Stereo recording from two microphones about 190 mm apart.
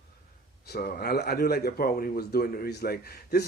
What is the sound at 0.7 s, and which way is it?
Speech, 55° left (ahead or behind).